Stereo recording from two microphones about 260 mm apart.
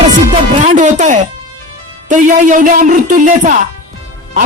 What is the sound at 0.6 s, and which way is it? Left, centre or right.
Speech, right.